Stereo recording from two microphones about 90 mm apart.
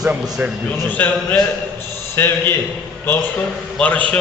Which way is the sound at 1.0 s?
20° left (ahead or behind).